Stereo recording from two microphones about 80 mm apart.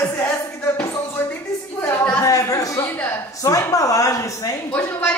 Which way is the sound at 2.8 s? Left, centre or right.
Left.